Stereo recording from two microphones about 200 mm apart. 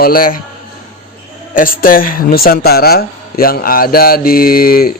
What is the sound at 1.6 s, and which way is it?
A man's voice, 45° left (ahead or behind).